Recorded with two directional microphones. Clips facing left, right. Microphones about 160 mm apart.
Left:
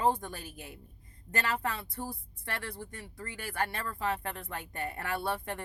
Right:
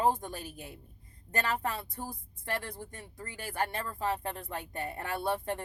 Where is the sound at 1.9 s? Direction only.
20° right (ahead or behind).